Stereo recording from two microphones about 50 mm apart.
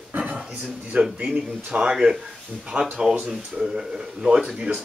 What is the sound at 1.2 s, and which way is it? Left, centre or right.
Speech, right.